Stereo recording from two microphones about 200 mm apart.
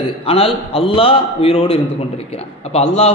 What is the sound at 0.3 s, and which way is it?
A man's voice, 30° left (ahead or behind).